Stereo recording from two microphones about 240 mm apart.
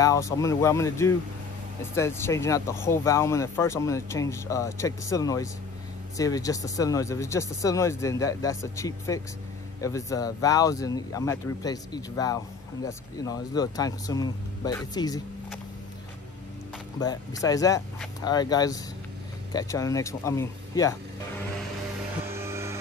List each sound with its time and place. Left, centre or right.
0.0 s speech: centre
17.0 s speech: centre
22.2 s music: centre